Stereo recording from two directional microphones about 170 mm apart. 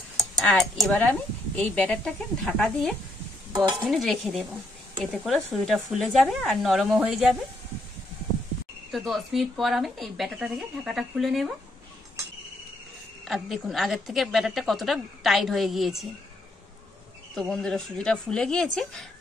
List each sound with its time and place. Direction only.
0.4 s a woman's voice: centre (ahead or behind)
3.5 s stir: 20° right (ahead or behind)
3.8 s a woman's voice: centre (ahead or behind)
8.9 s a woman's voice: centre (ahead or behind)
13.2 s a woman's voice: centre (ahead or behind)
17.4 s a woman's voice: 5° left (ahead or behind)